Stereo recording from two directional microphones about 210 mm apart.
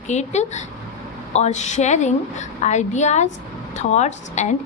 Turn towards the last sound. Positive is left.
turn(degrees=35)  # may be behind; listen again after turning